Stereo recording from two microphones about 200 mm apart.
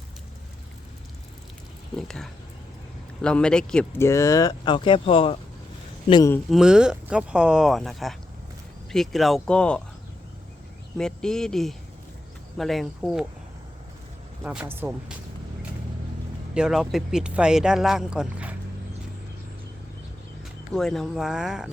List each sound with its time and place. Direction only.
2.0 s speech: centre (ahead or behind); by 6.3 s 20° left (ahead or behind)
6.3 s speech: centre (ahead or behind)
10.9 s speech: 5° left (ahead or behind)
14.4 s speech: 10° right (ahead or behind)
16.6 s speech: 5° right (ahead or behind)
20.7 s speech: centre (ahead or behind)